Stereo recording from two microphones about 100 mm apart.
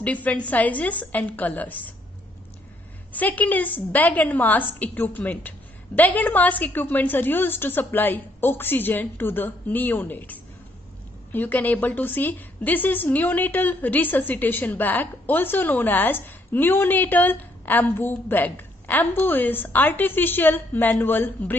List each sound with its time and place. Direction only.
0.0 s a woman's voice: 15° left (ahead or behind)
3.1 s a woman's voice: 15° left (ahead or behind)